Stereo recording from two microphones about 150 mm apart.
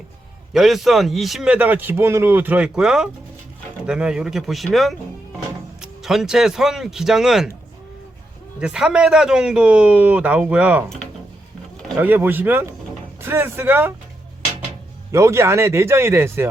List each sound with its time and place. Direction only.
0.5 s a man's voice: centre (ahead or behind)
8.6 s a man's voice: 5° right (ahead or behind)
11.9 s a man's voice: 10° right (ahead or behind)
15.1 s a man's voice: 20° right (ahead or behind)